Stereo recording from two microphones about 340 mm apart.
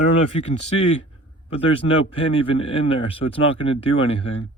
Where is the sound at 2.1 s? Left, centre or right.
Centre.